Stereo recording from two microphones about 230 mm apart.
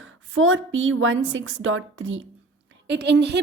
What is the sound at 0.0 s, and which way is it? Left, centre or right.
A woman's voice, right.